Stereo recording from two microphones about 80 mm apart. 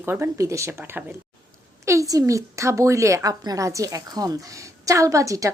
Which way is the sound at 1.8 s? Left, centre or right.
Right.